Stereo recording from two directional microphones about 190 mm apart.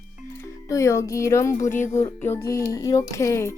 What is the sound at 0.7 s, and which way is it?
Speech, 15° left (ahead or behind).